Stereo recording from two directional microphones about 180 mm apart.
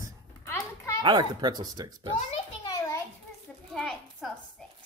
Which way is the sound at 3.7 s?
5° left (ahead or behind).